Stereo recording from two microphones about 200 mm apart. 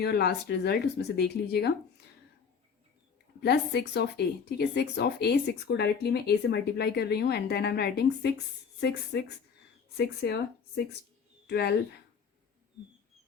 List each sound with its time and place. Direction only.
0.0 s speech: 55° left (ahead or behind)
3.4 s speech: 55° left (ahead or behind)